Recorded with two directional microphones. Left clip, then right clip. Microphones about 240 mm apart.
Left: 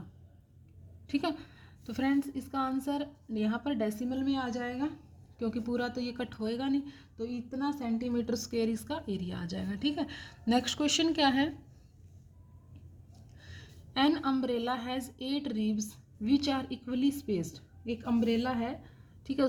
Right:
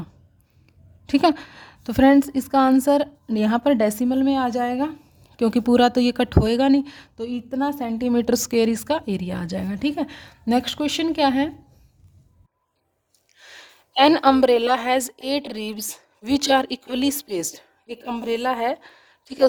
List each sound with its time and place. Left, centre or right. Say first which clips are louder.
1.0 s a woman's voice: right 15 dB; right
5.4 s a woman's voice: right 17 dB; right; by 11.5 s centre
13.4 s a woman's voice: right 11 dB; right